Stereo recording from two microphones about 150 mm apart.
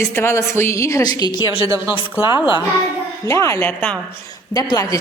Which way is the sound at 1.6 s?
20° right (ahead or behind).